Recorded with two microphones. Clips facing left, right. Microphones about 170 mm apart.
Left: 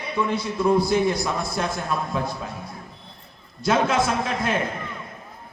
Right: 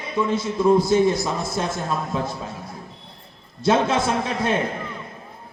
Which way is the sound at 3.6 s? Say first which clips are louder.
Right 1 dB; 25° right (ahead or behind).